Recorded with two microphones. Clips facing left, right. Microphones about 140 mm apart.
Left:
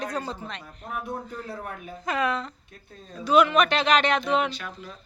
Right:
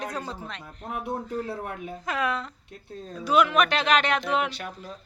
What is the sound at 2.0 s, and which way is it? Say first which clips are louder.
Speech: left 2 dB; 5° right (ahead or behind).